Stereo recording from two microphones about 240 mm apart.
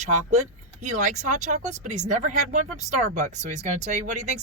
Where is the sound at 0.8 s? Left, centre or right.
Right.